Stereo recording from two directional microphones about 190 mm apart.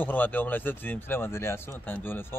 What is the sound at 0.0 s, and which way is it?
Speech, 10° left (ahead or behind).